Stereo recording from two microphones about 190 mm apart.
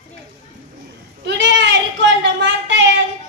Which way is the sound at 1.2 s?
70° right (ahead or behind).